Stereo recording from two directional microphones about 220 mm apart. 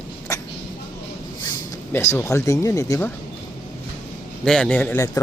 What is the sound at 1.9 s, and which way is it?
Speech, 10° left (ahead or behind).